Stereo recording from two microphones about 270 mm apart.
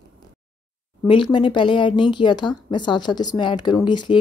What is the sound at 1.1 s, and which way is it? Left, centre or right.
A woman's voice, centre.